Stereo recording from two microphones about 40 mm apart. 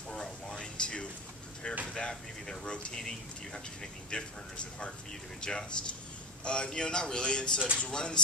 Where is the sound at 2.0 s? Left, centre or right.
Centre.